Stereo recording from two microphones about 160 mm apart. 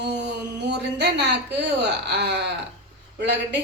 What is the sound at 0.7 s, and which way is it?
A woman's voice, 90° right.